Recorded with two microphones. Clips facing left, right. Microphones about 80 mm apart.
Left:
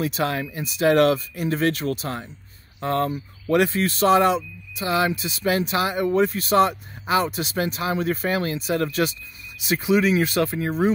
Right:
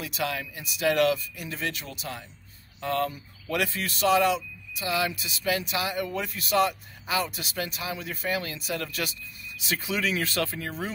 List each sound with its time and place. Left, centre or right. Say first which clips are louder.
0.0 s speech: left 7 dB; left
2.8 s speech: left 5 dB; left
9.6 s speech: left 9 dB; left